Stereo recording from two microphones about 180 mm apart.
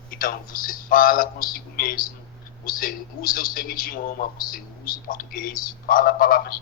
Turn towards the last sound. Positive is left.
turn(degrees=55)  # may be behind; listen again after turning